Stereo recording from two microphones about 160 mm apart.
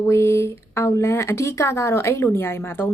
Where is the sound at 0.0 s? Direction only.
15° left (ahead or behind).